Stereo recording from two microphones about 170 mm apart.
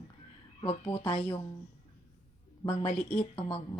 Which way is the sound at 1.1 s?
35° left (ahead or behind).